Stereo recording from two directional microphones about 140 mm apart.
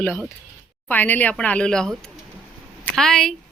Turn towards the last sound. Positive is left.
turn(degrees=5)  # may be behind; listen again after turning